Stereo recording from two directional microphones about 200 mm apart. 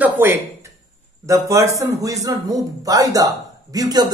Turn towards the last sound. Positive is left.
turn(degrees=-20)  # may be behind; listen again after turning